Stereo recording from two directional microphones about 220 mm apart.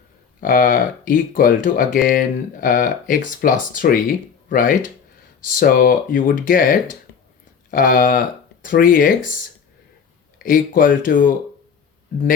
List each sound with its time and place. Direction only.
0.4 s speech: 40° left (ahead or behind)
10.3 s speech: 40° left (ahead or behind)